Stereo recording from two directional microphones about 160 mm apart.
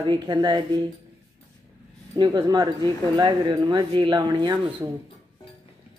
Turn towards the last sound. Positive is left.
turn(degrees=-25)  # may be behind; listen again after turning